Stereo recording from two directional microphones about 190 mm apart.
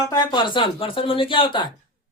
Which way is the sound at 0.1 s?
20° left (ahead or behind).